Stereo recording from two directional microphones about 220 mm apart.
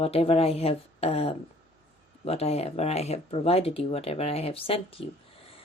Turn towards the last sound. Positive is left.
turn(degrees=25)  # may be behind; listen again after turning